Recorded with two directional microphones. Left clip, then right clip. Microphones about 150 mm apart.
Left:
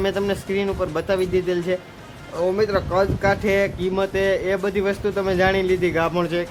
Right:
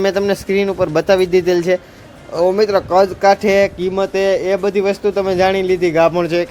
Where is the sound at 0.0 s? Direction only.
40° right (ahead or behind).